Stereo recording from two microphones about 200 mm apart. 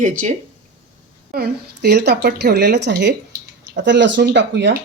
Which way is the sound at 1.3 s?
50° right (ahead or behind).